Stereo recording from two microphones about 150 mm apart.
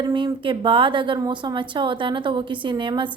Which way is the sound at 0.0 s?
30° right (ahead or behind).